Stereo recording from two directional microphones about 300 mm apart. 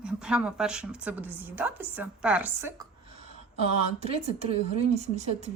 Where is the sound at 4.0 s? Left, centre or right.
Right.